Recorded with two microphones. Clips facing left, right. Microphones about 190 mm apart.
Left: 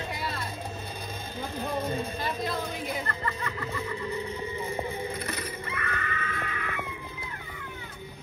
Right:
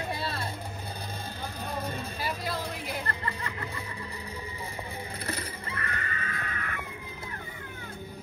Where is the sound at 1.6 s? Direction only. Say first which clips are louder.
Left 5 dB; 30° left (ahead or behind).